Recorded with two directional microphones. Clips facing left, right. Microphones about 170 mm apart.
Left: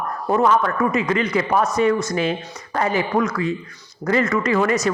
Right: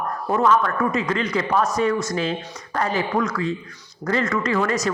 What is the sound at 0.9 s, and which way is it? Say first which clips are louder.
Speech: left 3 dB; 5° left (ahead or behind).